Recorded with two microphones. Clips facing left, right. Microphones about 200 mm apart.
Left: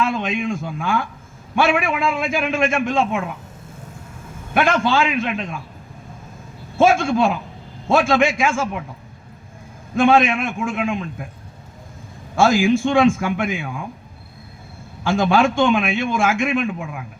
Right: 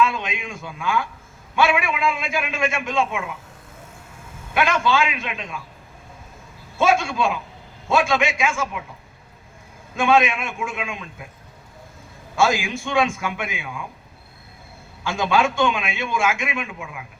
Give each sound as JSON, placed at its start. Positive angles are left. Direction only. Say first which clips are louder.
{"t": 0.0, "sound": "a man's voice", "louder": "left 2 dB", "side_deg": 50}
{"t": 4.5, "sound": "a man's voice", "louder": "left 3 dB", "side_deg": 50}
{"t": 6.7, "sound": "a man's voice", "louder": "left 4 dB", "side_deg": 50}
{"t": 9.9, "sound": "a man's voice", "louder": "left 3 dB", "side_deg": 50}
{"t": 12.4, "sound": "a man's voice", "louder": "left 6 dB", "side_deg": 50}
{"t": 15.0, "sound": "a man's voice", "louder": "left 4 dB", "side_deg": 50}